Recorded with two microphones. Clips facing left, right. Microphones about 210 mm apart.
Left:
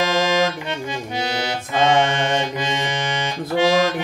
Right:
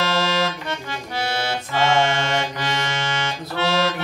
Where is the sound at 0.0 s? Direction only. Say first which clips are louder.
Left 3 dB; 15° left (ahead or behind).